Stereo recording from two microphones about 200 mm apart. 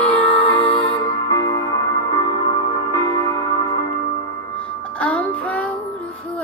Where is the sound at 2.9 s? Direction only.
20° left (ahead or behind).